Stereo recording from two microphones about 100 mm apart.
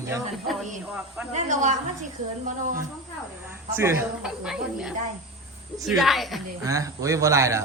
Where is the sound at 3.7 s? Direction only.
25° right (ahead or behind).